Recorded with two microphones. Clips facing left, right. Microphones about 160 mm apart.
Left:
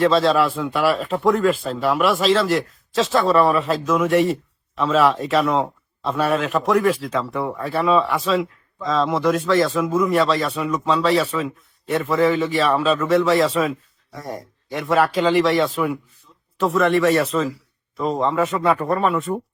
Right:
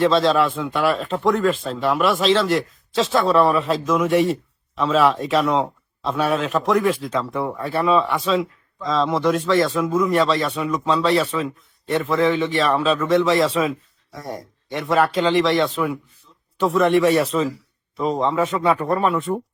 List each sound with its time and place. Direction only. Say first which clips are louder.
0.0 s speech: even; centre (ahead or behind)